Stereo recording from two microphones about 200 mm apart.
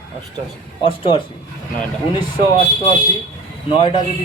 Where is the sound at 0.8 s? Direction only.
25° left (ahead or behind).